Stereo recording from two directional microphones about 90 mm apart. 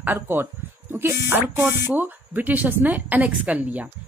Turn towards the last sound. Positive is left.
turn(degrees=-15)  # may be behind; listen again after turning